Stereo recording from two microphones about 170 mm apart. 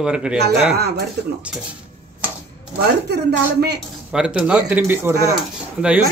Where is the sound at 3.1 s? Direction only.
75° right (ahead or behind).